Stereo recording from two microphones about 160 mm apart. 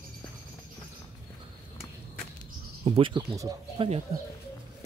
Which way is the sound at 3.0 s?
30° right (ahead or behind).